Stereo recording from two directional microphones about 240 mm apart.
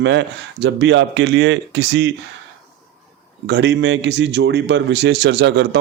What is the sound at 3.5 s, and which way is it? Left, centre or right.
Speech, right.